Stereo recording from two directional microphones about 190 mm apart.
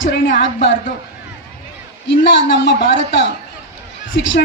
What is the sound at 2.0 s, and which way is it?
A man's voice, 70° left (ahead or behind).